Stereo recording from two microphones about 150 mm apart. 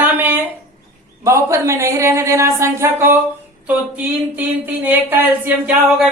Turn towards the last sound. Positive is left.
turn(degrees=-10)  # may be behind; listen again after turning